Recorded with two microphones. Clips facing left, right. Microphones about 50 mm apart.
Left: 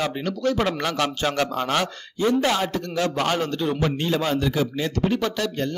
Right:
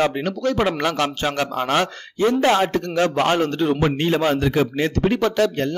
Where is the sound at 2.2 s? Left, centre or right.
Right.